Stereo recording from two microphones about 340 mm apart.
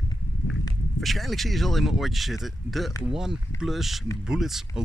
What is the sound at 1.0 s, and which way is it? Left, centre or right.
Speech, centre.